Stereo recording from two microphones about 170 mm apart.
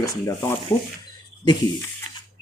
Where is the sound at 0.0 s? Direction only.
20° left (ahead or behind).